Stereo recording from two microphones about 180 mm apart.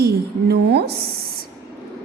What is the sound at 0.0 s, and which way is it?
Speech, 65° right (ahead or behind).